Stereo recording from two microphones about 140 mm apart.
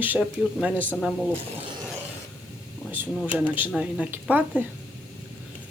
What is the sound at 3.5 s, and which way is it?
Speech, 10° right (ahead or behind).